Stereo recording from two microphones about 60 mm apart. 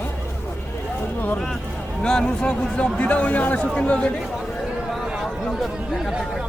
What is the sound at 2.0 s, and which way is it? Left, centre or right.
Speech, centre.